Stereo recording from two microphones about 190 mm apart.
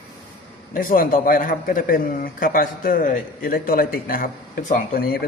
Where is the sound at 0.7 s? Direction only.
45° left (ahead or behind).